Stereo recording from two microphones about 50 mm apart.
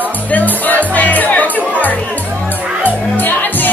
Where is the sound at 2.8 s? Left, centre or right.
Left.